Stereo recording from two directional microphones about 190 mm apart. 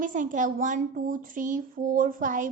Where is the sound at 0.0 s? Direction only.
45° right (ahead or behind).